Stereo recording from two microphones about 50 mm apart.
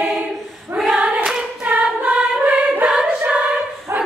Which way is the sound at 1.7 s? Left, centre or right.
Right.